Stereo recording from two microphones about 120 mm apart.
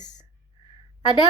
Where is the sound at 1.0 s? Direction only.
40° left (ahead or behind).